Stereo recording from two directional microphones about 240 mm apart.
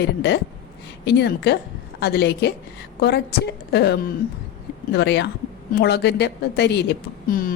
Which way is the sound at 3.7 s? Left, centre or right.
Left.